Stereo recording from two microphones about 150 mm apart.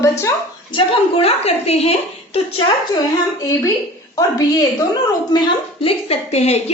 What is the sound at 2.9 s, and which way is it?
A woman's voice, 25° left (ahead or behind).